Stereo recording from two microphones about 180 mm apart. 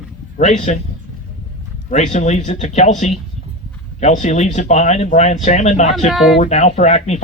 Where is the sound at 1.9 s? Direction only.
40° left (ahead or behind).